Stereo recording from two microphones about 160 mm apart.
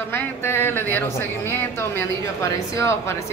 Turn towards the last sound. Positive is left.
turn(degrees=20)  # may be behind; listen again after turning